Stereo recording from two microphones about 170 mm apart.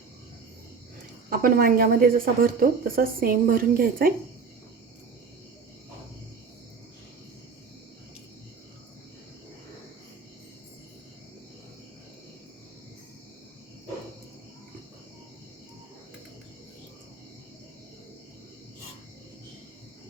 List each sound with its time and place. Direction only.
1.3 s speech: 60° right (ahead or behind)